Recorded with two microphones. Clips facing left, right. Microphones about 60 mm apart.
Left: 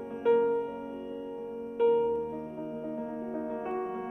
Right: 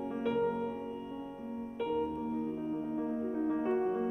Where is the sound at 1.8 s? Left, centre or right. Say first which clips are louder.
Left 9 dB; centre.